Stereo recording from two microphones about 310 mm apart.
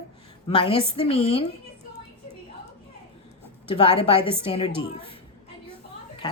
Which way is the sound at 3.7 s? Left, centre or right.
Centre.